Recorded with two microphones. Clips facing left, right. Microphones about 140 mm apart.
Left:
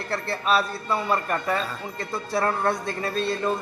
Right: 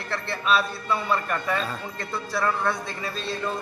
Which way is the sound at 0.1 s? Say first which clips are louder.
Left 1 dB; 40° left (ahead or behind).